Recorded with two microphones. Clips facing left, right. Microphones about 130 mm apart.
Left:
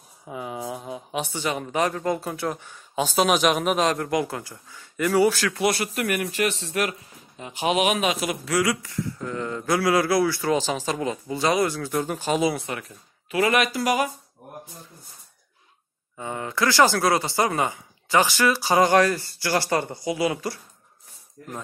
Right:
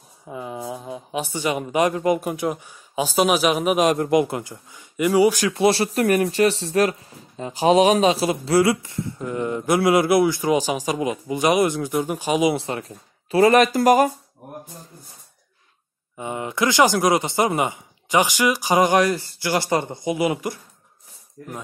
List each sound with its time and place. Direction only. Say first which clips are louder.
0.3 s speech: right 1 dB; 5° left (ahead or behind)
1.4 s speech: right 5 dB; 10° right (ahead or behind)
3.8 s speech: right 5 dB; 20° right (ahead or behind)
5.5 s speech: right 5 dB; 25° right (ahead or behind)
12.5 s speech: right 5 dB; 30° right (ahead or behind)
16.2 s speech: right 2 dB; 20° right (ahead or behind)